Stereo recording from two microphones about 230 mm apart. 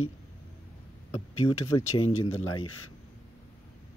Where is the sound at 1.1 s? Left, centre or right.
Left.